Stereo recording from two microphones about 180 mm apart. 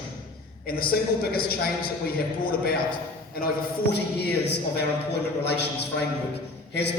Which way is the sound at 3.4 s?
55° left (ahead or behind).